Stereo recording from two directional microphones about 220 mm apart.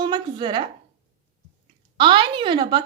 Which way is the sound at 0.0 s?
20° right (ahead or behind).